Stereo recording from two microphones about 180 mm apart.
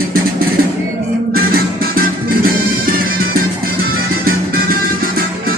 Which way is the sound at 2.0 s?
55° right (ahead or behind).